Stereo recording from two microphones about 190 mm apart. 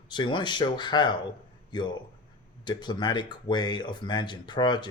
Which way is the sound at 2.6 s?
25° left (ahead or behind).